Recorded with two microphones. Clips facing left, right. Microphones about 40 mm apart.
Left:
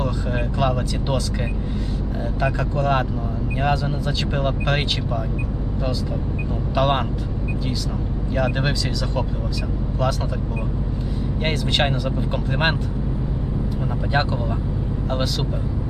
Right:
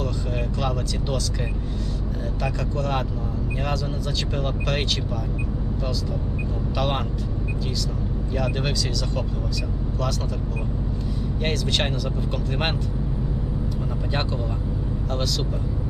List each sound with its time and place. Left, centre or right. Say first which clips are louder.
0.0 s speech: left 3 dB; left
2.4 s speech: left 5 dB; left
6.7 s speech: left 6 dB; left
8.4 s speech: left 4 dB; left
11.4 s speech: left 3 dB; centre